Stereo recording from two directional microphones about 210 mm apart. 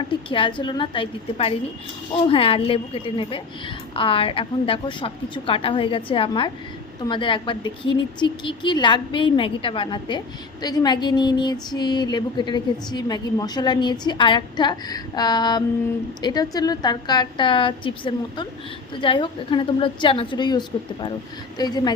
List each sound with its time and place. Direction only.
0.3 s a woman's voice: 25° left (ahead or behind)